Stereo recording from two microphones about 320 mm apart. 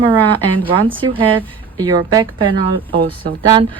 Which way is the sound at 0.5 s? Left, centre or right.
Centre.